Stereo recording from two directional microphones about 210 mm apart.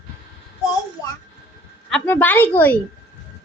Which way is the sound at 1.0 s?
15° left (ahead or behind).